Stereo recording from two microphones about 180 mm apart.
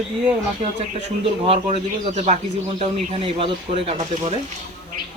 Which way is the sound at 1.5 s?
35° right (ahead or behind).